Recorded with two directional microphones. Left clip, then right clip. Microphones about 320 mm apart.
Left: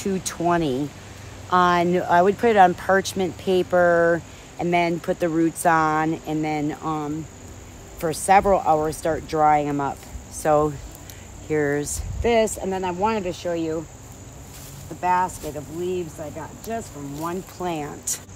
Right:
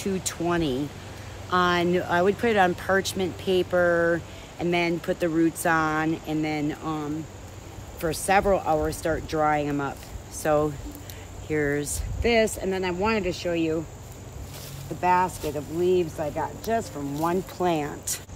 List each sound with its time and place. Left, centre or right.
0.0 s speech: centre
15.0 s speech: centre